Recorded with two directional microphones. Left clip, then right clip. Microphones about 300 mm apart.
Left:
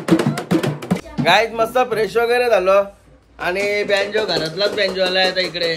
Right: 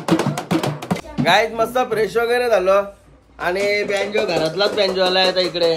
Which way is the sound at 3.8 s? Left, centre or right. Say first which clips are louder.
Left 3 dB; centre.